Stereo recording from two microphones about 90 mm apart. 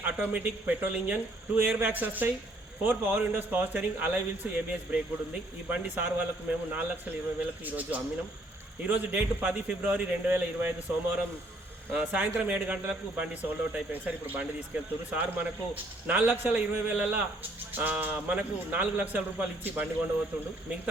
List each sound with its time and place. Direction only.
0.0 s a man's voice: 20° right (ahead or behind)